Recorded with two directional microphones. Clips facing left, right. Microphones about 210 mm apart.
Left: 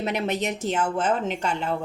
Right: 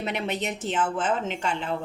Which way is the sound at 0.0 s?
40° left (ahead or behind).